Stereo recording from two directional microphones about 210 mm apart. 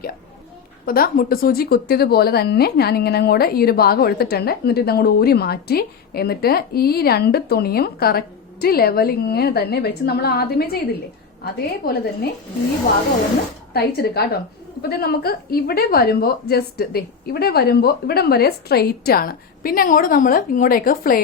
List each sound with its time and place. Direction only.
0.9 s speech: 45° left (ahead or behind)
13.7 s speech: 50° left (ahead or behind)